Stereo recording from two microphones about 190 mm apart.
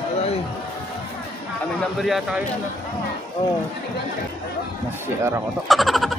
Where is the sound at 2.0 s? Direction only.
Centre (ahead or behind).